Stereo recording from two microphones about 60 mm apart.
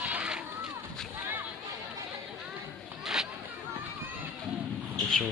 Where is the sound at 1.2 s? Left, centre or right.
Right.